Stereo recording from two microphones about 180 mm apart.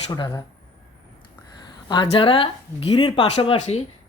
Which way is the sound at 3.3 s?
35° left (ahead or behind).